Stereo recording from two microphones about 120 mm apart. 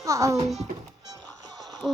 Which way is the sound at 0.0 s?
25° right (ahead or behind).